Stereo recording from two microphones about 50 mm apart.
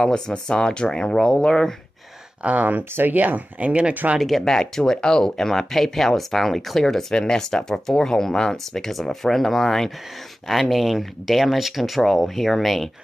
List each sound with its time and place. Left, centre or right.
0.0 s speech: centre
2.4 s speech: right
4.2 s speech: centre
10.5 s speech: centre